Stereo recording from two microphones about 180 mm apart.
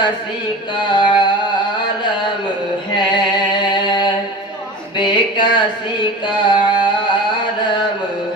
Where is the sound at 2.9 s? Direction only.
25° left (ahead or behind).